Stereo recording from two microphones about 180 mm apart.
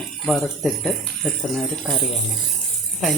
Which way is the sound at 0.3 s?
5° left (ahead or behind).